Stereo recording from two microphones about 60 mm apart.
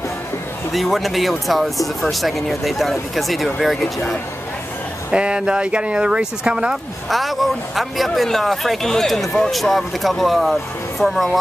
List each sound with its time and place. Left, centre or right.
0.7 s speech: centre
5.1 s speech: centre
7.1 s speech: centre